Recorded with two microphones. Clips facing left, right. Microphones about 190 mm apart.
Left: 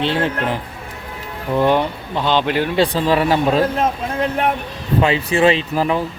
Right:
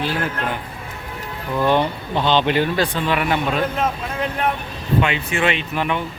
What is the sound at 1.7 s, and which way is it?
Speech, 10° left (ahead or behind).